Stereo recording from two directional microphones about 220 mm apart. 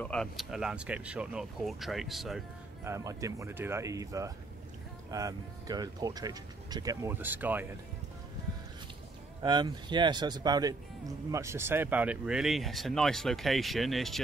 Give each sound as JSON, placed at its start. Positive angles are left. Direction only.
{"t": 0.0, "sound": "speech", "side_deg": 5}
{"t": 2.8, "sound": "speech", "side_deg": -15}
{"t": 9.4, "sound": "speech", "side_deg": -20}